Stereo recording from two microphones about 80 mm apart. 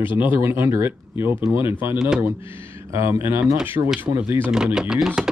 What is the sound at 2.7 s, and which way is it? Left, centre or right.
Speech, right.